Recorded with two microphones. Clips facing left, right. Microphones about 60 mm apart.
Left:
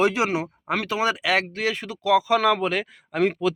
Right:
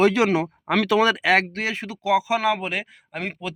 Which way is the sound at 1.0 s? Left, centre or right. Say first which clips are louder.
Right 3 dB; right.